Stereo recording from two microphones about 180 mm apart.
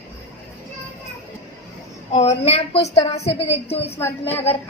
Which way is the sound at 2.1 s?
35° left (ahead or behind).